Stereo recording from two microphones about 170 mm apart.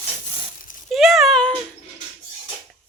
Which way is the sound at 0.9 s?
Centre (ahead or behind).